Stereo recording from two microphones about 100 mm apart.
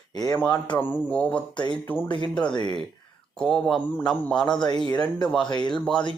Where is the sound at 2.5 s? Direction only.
50° left (ahead or behind).